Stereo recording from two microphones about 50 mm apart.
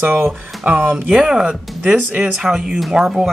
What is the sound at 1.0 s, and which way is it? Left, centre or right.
Speech, centre.